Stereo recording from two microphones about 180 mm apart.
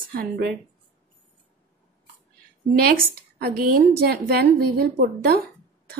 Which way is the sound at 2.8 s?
55° right (ahead or behind).